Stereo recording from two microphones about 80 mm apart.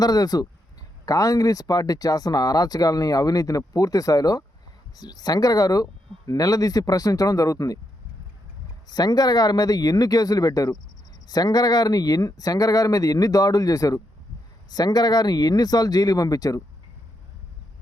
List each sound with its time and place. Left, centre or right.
0.0 s speech: left
8.9 s speech: left